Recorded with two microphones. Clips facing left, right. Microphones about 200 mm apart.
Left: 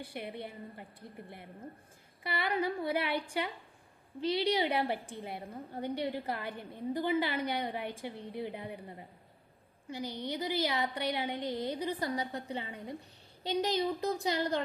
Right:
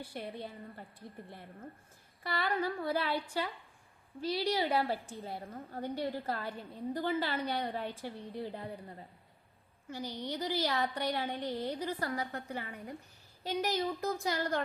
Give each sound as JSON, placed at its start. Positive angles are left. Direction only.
{"t": 0.1, "sound": "a woman's voice", "side_deg": 10}
{"t": 10.0, "sound": "a woman's voice", "side_deg": -10}
{"t": 10.2, "sound": "a woman's voice", "side_deg": 10}